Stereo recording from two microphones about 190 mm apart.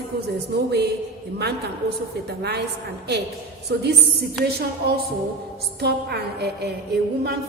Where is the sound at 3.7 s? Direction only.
60° right (ahead or behind).